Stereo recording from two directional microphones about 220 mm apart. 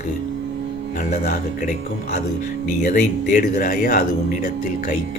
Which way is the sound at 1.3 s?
35° left (ahead or behind).